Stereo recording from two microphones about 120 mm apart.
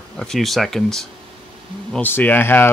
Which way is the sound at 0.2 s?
5° left (ahead or behind).